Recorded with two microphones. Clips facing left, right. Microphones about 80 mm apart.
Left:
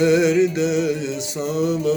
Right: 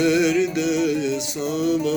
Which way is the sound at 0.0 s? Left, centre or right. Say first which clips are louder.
Left 3 dB; left.